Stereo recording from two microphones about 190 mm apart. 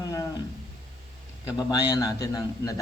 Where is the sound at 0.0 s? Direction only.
15° left (ahead or behind).